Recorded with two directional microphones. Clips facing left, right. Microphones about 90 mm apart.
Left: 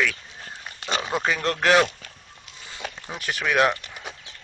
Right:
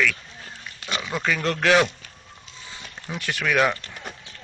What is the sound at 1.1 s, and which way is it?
Speech, 20° left (ahead or behind).